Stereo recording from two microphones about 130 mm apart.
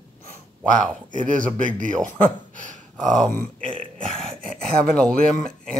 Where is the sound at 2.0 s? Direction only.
10° left (ahead or behind).